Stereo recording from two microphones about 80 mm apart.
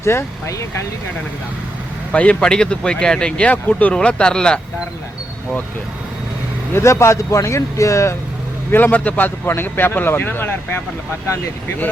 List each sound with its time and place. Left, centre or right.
0.0 s speech: left
2.1 s speech: centre
6.7 s speech: left
8.7 s a man's voice: left